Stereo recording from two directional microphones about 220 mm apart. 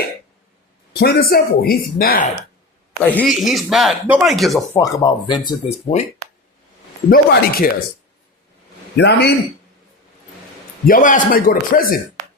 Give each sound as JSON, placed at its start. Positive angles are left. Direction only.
{"t": 0.9, "sound": "speech", "side_deg": 45}
{"t": 3.0, "sound": "speech", "side_deg": 5}
{"t": 4.8, "sound": "speech", "side_deg": 20}
{"t": 7.1, "sound": "speech", "side_deg": 40}
{"t": 9.0, "sound": "speech", "side_deg": 50}
{"t": 10.8, "sound": "speech", "side_deg": 40}